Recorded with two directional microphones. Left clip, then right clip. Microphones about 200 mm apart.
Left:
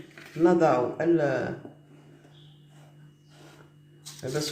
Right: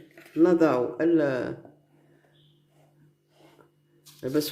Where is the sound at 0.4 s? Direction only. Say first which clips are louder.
Even; 60° right (ahead or behind).